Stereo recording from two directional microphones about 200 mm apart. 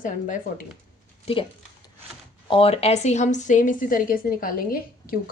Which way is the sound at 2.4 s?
25° left (ahead or behind).